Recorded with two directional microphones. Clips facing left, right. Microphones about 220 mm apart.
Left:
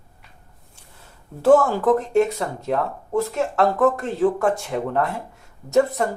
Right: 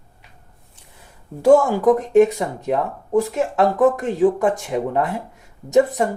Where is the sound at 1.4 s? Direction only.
10° right (ahead or behind).